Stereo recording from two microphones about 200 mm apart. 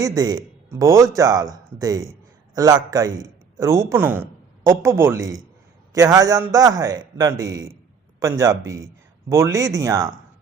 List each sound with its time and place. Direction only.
0.0 s a man's voice: 20° right (ahead or behind)